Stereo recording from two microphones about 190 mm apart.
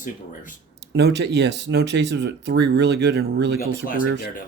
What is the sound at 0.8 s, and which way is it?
Speech, 65° right (ahead or behind).